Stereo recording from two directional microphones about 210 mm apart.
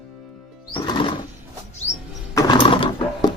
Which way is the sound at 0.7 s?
25° left (ahead or behind).